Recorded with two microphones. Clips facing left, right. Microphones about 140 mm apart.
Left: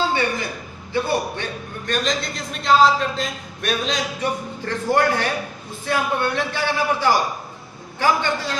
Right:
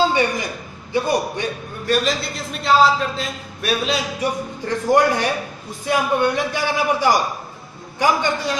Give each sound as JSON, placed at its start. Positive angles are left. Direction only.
{"t": 0.9, "sound": "a man's voice", "side_deg": -15}